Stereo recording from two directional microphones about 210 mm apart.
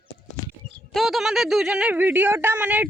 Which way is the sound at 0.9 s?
Centre (ahead or behind).